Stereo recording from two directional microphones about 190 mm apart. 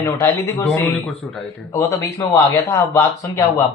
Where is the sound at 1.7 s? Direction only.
15° left (ahead or behind).